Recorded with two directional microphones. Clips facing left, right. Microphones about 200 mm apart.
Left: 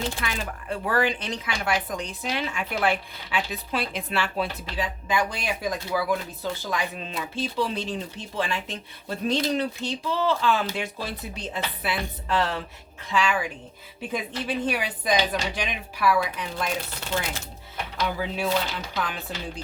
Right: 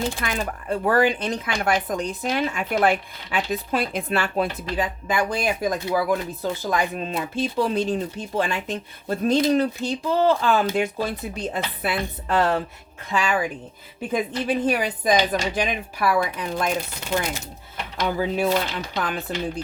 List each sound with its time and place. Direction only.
0.2 s speech: 45° right (ahead or behind)
18.0 s speech: 45° right (ahead or behind)